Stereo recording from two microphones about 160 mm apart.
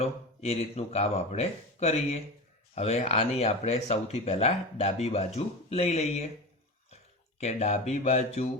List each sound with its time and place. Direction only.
0.0 s speech: 40° left (ahead or behind)